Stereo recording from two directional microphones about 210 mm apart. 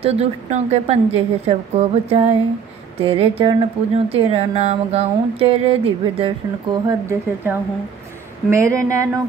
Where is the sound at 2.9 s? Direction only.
25° right (ahead or behind).